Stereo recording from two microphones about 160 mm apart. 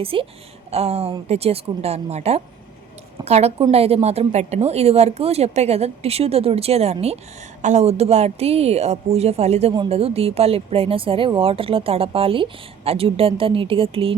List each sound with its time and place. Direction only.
0.0 s a woman's voice: 35° right (ahead or behind)